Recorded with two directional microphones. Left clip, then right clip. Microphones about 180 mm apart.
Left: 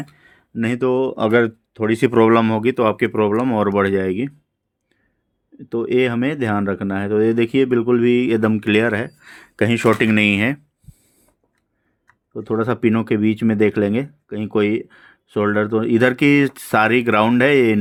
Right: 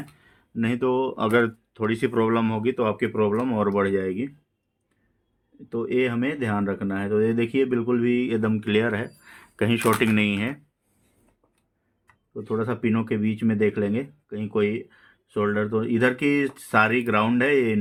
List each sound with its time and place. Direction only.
0.2 s speech: 50° left (ahead or behind); by 4.3 s 75° left (ahead or behind)
5.6 s speech: 65° left (ahead or behind)
12.3 s speech: 65° left (ahead or behind)